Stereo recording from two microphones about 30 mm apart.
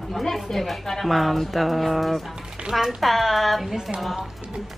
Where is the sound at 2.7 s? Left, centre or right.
Right.